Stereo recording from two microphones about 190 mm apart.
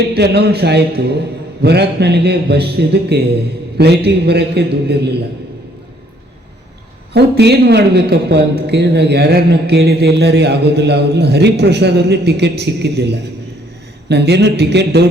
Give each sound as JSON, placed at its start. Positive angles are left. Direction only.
{"t": 0.0, "sound": "a man's voice", "side_deg": -60}
{"t": 7.1, "sound": "a man's voice", "side_deg": -60}